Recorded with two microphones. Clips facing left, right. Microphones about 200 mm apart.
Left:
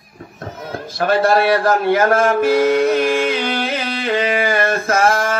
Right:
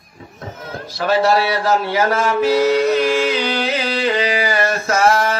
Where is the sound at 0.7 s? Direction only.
50° left (ahead or behind).